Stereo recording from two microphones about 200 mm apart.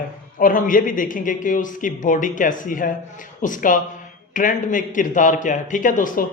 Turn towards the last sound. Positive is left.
turn(degrees=40)  # may be behind; listen again after turning